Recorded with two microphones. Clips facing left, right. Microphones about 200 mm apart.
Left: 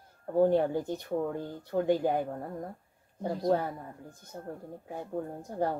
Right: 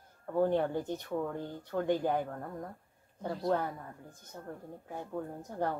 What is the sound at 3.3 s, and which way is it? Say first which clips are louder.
Speech: left 4 dB; 40° left (ahead or behind).